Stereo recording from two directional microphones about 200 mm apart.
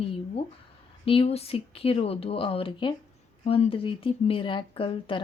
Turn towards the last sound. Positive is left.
turn(degrees=25)  # may be behind; listen again after turning